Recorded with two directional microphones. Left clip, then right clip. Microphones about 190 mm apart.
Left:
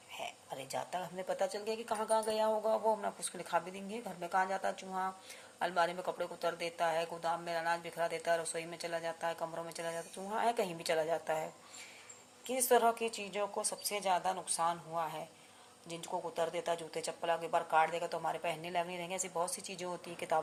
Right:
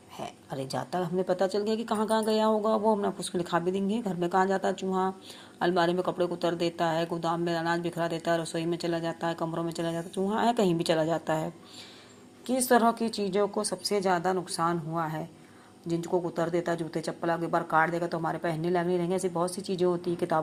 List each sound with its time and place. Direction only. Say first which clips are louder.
0.2 s a woman's voice: right 7 dB; 20° right (ahead or behind)
12.6 s a woman's voice: right 5 dB; 20° right (ahead or behind)
16.3 s a woman's voice: right 6 dB; 15° right (ahead or behind)